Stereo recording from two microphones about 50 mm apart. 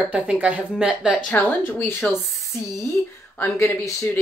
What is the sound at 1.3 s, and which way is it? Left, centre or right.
Speech, left.